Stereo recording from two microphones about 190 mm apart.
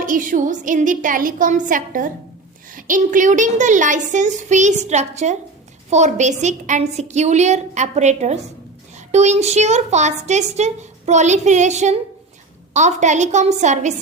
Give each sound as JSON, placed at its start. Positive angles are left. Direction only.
{"t": 0.0, "sound": "a woman's voice", "side_deg": -45}